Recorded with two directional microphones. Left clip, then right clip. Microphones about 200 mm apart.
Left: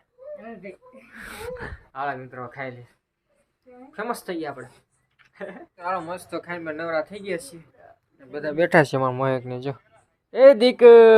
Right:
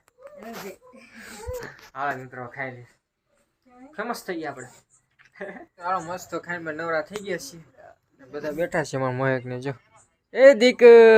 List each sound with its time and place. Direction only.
1.9 s speech: centre (ahead or behind)
3.9 s speech: centre (ahead or behind)
8.5 s speech: 55° left (ahead or behind)
9.0 s speech: centre (ahead or behind)